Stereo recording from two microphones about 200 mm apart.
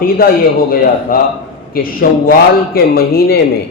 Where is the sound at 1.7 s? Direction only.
45° left (ahead or behind).